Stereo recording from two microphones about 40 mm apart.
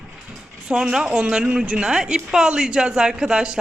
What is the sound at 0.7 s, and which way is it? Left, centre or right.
A woman's voice, centre.